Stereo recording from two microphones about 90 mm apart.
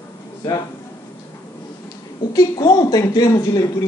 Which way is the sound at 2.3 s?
45° left (ahead or behind).